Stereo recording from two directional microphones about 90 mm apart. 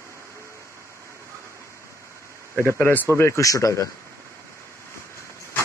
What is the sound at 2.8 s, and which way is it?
Speech, 20° left (ahead or behind).